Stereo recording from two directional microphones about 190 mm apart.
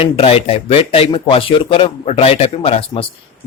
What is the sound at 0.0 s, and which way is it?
Speech, 30° left (ahead or behind).